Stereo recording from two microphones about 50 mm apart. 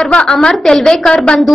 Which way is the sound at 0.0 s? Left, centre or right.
Centre.